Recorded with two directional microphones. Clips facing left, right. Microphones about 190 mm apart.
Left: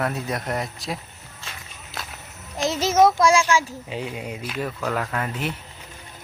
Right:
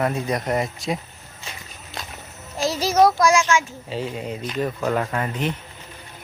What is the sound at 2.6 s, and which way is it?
Child singing, 20° left (ahead or behind).